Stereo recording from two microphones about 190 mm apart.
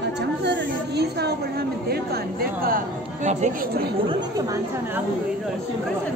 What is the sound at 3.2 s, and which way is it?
Speech, 40° right (ahead or behind).